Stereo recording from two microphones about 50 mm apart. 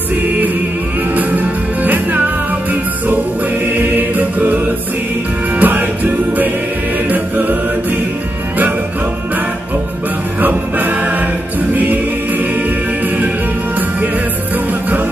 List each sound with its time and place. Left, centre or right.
1.1 s music: right
3.6 s choir: right
5.6 s music: right
10.4 s music: right
14.7 s music: right